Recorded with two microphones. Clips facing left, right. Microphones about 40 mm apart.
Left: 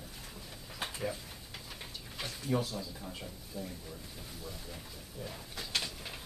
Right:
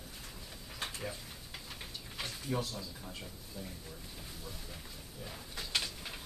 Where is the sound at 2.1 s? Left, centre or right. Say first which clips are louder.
Left 3 dB; centre.